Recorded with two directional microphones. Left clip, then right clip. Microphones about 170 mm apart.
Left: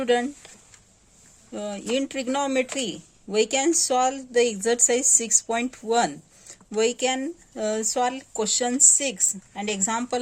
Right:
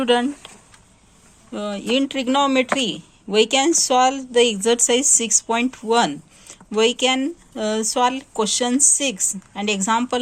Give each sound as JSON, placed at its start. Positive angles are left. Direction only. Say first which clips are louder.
{"t": 0.0, "sound": "speech", "louder": "right 4 dB", "side_deg": 30}
{"t": 1.5, "sound": "speech", "louder": "right 5 dB", "side_deg": 25}